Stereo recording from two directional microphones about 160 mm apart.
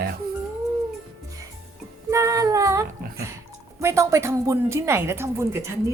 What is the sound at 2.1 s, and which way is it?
A woman's voice, 20° right (ahead or behind).